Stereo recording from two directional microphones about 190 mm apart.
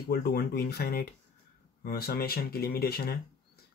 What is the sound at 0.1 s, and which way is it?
Speech, 50° left (ahead or behind).